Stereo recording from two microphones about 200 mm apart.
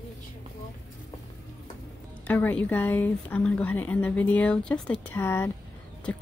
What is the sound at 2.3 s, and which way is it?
A woman's voice, 10° left (ahead or behind).